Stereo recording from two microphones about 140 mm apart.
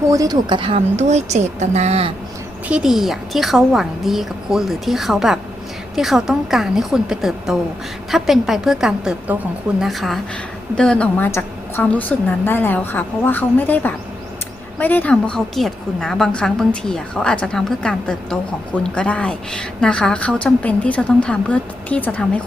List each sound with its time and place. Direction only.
0.1 s a woman's voice: 25° right (ahead or behind); by 2.1 s 45° right (ahead or behind)
2.6 s a woman's voice: 5° right (ahead or behind)